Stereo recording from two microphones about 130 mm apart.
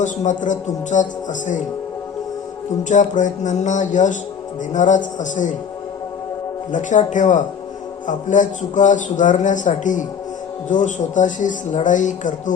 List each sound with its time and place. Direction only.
0.0 s a man's voice: 75° left (ahead or behind)
2.9 s a man's voice: 75° left (ahead or behind)
6.7 s a man's voice: 75° left (ahead or behind)